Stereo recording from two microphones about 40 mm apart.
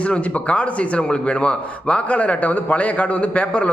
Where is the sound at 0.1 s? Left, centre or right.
Left.